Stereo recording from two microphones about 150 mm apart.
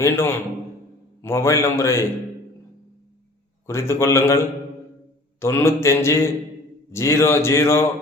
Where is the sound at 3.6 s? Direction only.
20° left (ahead or behind).